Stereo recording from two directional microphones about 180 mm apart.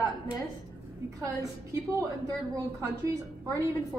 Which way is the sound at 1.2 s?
15° right (ahead or behind).